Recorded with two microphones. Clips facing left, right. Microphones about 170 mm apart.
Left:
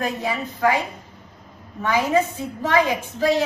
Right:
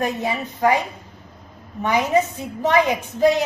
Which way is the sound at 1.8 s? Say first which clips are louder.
Right 1 dB; 20° right (ahead or behind).